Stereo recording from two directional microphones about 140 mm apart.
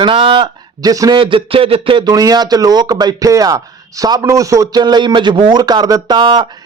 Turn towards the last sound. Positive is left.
turn(degrees=-30)  # may be behind; listen again after turning